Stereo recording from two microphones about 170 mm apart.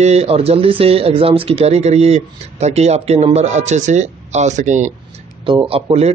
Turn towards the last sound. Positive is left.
turn(degrees=-35)  # may be behind; listen again after turning